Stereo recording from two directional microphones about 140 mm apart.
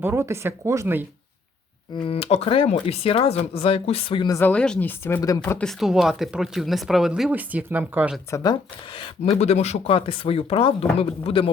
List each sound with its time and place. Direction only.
0.0 s speech: 20° right (ahead or behind)
2.0 s speech: 45° left (ahead or behind)
4.3 s speech: 15° left (ahead or behind)
5.6 s speech: centre (ahead or behind)
8.9 s speech: 40° left (ahead or behind)